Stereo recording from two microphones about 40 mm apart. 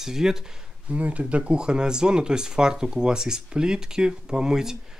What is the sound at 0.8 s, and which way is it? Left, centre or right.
Speech, right.